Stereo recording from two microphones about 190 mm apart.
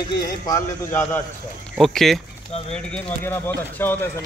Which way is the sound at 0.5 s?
15° left (ahead or behind).